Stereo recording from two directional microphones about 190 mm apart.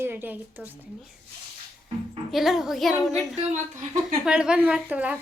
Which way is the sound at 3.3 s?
40° right (ahead or behind).